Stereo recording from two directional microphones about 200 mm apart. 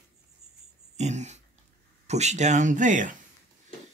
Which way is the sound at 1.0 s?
35° right (ahead or behind).